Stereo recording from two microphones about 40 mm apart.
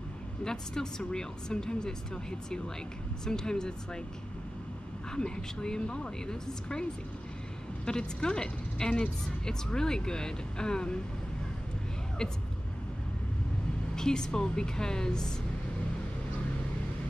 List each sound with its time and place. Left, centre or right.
0.4 s a woman's voice: centre
3.3 s a woman's voice: centre
5.1 s a woman's voice: centre
12.2 s a woman's voice: centre
13.9 s a woman's voice: centre